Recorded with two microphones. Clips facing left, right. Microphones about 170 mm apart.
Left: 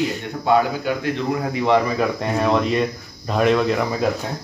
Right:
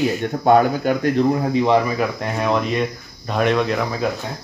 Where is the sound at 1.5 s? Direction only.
15° right (ahead or behind).